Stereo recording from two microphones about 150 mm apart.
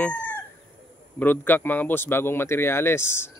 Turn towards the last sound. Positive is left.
turn(degrees=15)  # may be behind; listen again after turning